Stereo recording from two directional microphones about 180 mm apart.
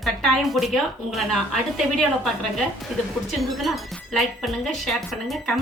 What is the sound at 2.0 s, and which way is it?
Speech, centre (ahead or behind).